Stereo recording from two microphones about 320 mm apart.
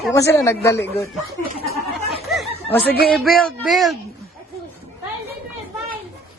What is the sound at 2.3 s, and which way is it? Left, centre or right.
Chatter, centre.